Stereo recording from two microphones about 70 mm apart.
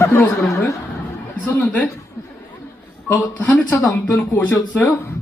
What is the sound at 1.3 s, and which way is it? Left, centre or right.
Speech, centre.